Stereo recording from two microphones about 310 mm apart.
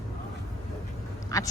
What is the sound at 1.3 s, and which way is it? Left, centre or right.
Speech, centre.